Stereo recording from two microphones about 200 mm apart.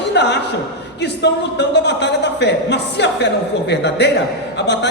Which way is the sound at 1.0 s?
60° left (ahead or behind).